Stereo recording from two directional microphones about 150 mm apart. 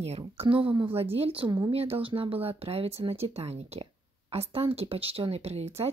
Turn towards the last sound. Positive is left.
turn(degrees=-45)  # may be behind; listen again after turning